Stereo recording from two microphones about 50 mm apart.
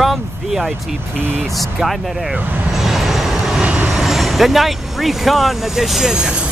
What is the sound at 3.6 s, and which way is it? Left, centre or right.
Vehicle, right.